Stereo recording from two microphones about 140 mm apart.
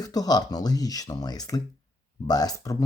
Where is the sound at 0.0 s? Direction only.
25° left (ahead or behind).